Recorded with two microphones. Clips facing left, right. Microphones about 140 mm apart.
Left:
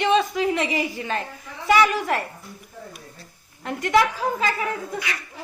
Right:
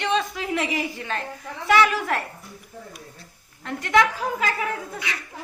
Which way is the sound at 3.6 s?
5° left (ahead or behind).